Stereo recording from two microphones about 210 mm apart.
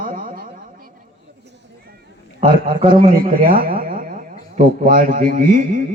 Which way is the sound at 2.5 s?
25° right (ahead or behind).